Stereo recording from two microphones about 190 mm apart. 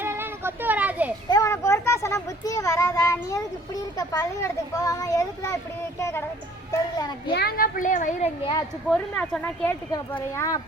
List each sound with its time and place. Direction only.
0.0 s child singing: 10° right (ahead or behind)
1.3 s a child's voice: 15° left (ahead or behind)
7.3 s a woman's voice: 50° left (ahead or behind)
8.9 s a child's voice: 5° left (ahead or behind)